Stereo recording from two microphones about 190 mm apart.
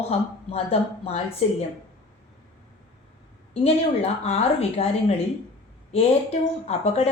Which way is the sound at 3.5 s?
30° left (ahead or behind).